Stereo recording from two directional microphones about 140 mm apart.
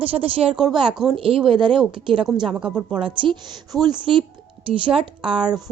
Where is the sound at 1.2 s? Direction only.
40° right (ahead or behind).